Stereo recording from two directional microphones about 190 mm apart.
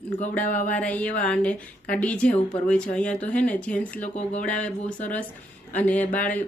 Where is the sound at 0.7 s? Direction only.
10° left (ahead or behind).